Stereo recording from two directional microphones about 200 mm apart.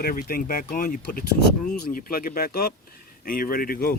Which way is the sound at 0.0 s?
45° left (ahead or behind).